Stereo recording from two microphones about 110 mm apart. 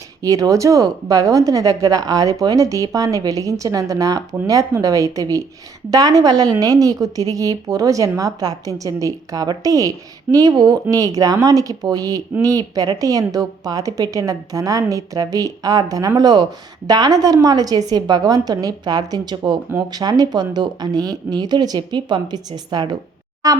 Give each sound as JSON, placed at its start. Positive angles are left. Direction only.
{"t": 0.2, "sound": "a woman's voice", "side_deg": -30}